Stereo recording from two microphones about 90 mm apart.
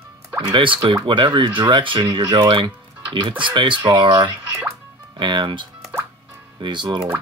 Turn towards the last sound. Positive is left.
turn(degrees=-60)  # may be behind; listen again after turning